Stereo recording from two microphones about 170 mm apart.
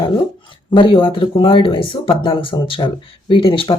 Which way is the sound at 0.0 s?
30° left (ahead or behind).